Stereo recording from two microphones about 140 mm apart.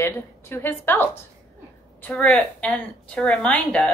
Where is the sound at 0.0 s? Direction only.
15° left (ahead or behind).